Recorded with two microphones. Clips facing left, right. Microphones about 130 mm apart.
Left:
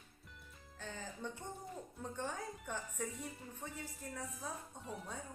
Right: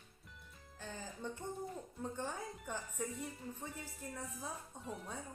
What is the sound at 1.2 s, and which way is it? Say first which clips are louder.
A woman's voice: right 5 dB; 10° right (ahead or behind).